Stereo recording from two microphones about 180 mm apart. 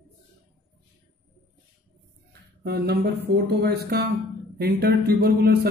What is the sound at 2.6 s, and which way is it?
Mantra, 65° right (ahead or behind).